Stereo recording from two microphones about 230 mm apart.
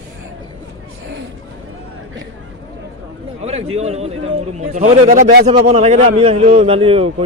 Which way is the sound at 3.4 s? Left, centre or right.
Right.